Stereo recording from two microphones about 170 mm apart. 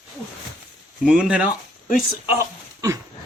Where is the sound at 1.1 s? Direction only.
5° right (ahead or behind).